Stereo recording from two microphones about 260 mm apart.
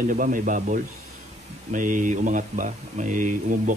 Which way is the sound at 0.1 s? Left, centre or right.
Right.